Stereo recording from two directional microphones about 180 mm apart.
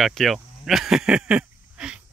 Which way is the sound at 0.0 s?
Centre (ahead or behind).